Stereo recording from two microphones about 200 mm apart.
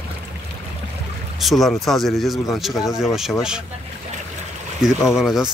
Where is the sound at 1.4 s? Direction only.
Centre (ahead or behind).